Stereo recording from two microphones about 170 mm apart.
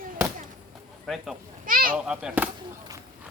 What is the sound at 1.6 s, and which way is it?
Speech, 55° right (ahead or behind).